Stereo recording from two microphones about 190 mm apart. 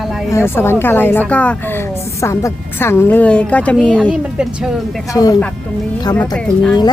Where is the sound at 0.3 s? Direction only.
15° left (ahead or behind).